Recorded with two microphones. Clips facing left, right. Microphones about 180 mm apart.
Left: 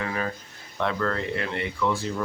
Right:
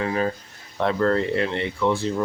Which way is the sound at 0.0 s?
30° right (ahead or behind).